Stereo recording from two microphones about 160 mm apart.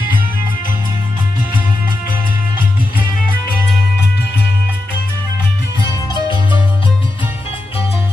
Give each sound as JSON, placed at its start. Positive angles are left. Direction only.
{"t": 5.9, "sound": "music", "side_deg": 30}